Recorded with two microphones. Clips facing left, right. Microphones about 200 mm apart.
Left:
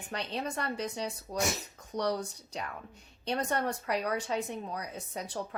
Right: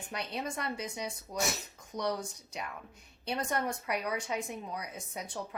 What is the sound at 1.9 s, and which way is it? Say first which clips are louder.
Speech: left 3 dB; 35° left (ahead or behind).